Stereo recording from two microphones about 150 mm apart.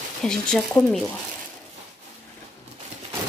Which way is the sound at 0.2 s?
5° left (ahead or behind).